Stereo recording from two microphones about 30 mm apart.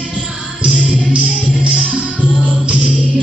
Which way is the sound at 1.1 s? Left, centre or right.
Right.